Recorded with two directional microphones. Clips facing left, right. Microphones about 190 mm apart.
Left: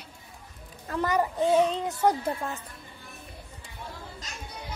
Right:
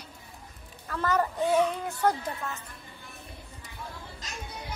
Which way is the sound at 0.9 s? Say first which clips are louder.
Left 1 dB; 15° left (ahead or behind).